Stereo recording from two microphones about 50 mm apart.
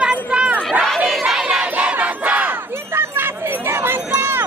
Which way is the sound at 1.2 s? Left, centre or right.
Centre.